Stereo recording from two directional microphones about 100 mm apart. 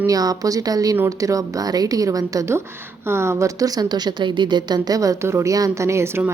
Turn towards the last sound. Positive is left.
turn(degrees=-25)  # may be behind; listen again after turning